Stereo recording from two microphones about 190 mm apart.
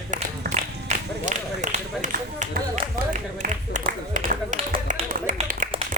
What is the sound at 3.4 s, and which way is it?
Clapping, 45° right (ahead or behind).